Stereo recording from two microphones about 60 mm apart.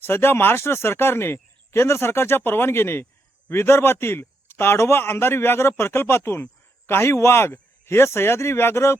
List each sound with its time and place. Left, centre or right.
0.0 s speech: left